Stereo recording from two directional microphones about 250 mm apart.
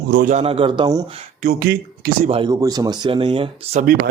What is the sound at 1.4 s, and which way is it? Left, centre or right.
Speech, right.